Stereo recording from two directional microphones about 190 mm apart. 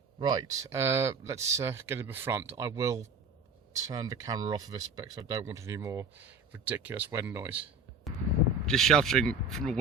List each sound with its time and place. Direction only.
0.2 s speech: 20° right (ahead or behind)
8.1 s a sound: centre (ahead or behind)
8.6 s speech: centre (ahead or behind)